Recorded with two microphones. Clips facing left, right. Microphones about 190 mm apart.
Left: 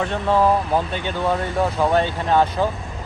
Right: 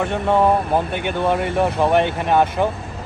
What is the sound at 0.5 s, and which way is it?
Speech, 60° right (ahead or behind).